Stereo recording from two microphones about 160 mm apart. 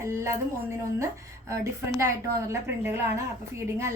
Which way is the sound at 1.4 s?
20° right (ahead or behind).